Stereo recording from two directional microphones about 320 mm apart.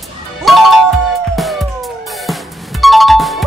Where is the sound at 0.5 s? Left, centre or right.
Centre.